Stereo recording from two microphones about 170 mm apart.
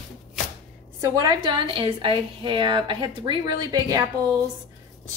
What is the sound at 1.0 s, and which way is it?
A woman's voice, 25° right (ahead or behind).